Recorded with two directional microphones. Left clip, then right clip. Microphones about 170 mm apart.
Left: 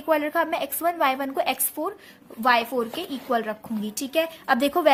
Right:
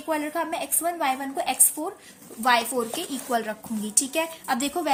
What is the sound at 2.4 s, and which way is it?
Speech, 15° left (ahead or behind).